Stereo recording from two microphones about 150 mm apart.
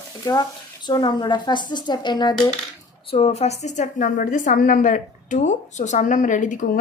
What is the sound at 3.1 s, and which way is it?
A woman's voice, 40° left (ahead or behind).